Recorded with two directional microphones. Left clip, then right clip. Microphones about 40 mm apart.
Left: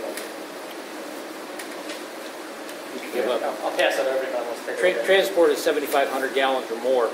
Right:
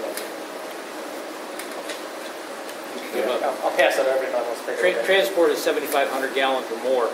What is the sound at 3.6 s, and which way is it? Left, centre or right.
Speech, right.